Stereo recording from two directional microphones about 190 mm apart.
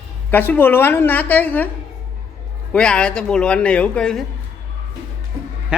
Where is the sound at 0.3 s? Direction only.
10° left (ahead or behind).